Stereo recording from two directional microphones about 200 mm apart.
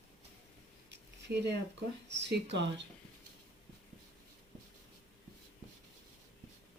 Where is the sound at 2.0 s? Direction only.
60° right (ahead or behind).